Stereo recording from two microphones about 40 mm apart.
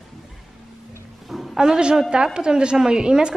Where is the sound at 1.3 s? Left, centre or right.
Centre.